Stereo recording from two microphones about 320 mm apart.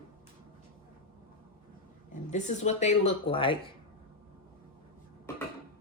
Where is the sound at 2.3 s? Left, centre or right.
Left.